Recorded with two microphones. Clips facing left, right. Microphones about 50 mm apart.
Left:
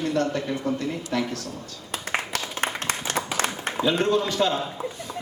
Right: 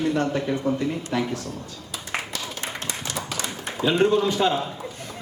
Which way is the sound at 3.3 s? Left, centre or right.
Left.